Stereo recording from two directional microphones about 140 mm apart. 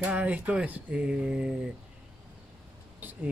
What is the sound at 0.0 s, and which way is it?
Speech, 10° right (ahead or behind).